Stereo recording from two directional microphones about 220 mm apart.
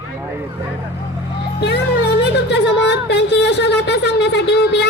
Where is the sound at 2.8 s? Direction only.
50° left (ahead or behind).